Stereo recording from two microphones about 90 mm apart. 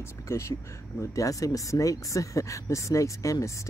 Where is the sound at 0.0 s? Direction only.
30° left (ahead or behind).